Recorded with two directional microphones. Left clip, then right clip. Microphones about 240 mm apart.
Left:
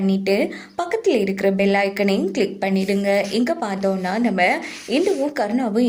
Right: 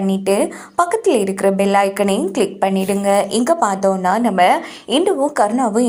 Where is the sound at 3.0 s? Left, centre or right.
Centre.